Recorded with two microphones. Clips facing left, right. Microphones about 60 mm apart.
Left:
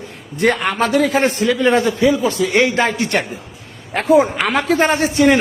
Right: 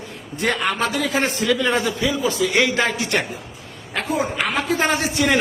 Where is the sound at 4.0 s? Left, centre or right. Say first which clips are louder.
Left 9 dB; left.